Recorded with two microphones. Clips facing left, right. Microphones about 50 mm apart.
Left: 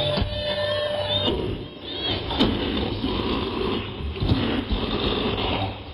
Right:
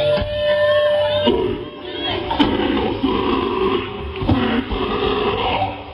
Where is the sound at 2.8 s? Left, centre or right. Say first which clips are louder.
Right 8 dB; right.